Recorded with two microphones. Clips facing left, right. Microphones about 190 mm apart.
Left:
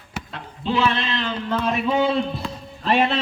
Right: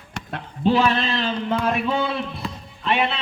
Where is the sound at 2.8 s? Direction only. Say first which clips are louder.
Left 3 dB; 40° left (ahead or behind).